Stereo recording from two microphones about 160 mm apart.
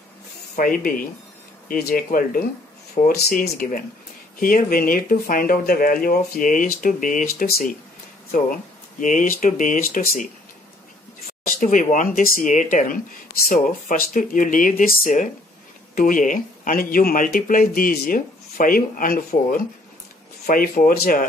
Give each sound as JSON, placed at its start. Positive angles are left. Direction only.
{"t": 0.6, "sound": "speech", "side_deg": 55}
{"t": 9.0, "sound": "speech", "side_deg": 55}
{"t": 11.6, "sound": "speech", "side_deg": 55}